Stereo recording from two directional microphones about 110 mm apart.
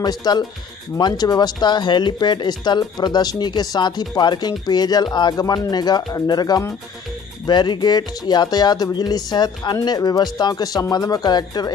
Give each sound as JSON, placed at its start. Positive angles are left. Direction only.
{"t": 0.0, "sound": "speech", "side_deg": 40}